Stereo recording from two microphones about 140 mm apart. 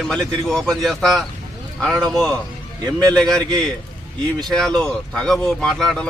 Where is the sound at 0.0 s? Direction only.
5° left (ahead or behind).